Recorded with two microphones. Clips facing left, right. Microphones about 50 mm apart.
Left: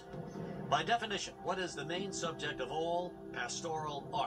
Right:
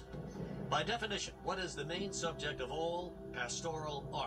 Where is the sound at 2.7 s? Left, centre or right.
Left.